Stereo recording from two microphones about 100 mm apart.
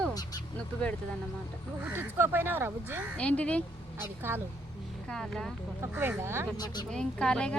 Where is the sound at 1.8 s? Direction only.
20° right (ahead or behind).